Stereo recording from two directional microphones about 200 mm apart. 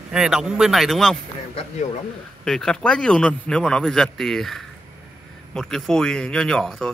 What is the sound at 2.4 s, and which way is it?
A man's voice, 5° left (ahead or behind).